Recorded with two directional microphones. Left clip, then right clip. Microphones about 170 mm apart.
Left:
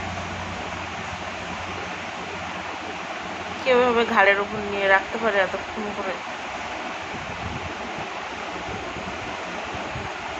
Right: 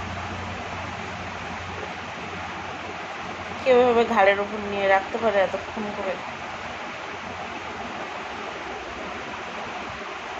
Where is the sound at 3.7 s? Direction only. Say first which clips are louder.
Right 1 dB; 15° right (ahead or behind).